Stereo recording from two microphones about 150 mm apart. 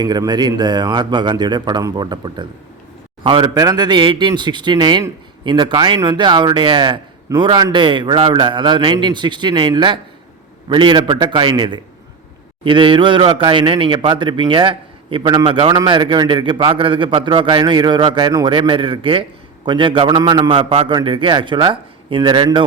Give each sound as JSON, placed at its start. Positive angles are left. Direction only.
{"t": 0.0, "sound": "a man's voice", "side_deg": -30}